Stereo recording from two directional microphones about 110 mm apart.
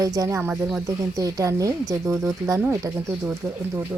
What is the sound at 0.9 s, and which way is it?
Speech, 30° right (ahead or behind).